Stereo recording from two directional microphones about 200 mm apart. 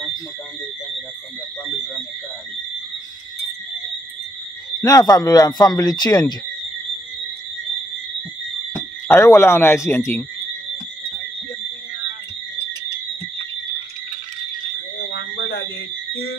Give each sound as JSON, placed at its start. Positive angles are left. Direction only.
{"t": 4.6, "sound": "speech", "side_deg": 20}
{"t": 9.0, "sound": "speech", "side_deg": 10}
{"t": 15.0, "sound": "a sound", "side_deg": 55}